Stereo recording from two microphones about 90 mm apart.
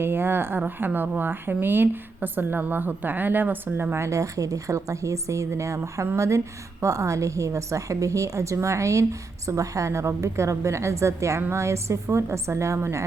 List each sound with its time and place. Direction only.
0.0 s a woman's voice: 25° right (ahead or behind)